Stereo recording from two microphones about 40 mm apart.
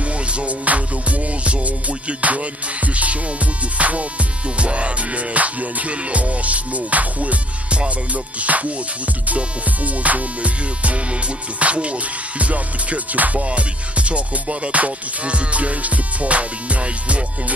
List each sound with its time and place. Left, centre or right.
0.3 s music: right
2.0 s music: right
10.0 s music: right